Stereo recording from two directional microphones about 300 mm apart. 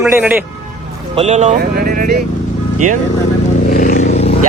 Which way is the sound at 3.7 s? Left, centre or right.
Left.